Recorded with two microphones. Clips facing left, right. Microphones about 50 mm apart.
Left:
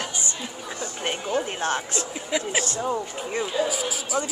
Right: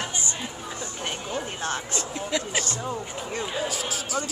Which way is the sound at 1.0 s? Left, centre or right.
Left.